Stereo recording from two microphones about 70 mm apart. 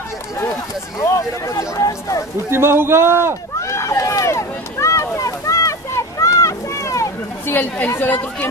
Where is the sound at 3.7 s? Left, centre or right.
Left.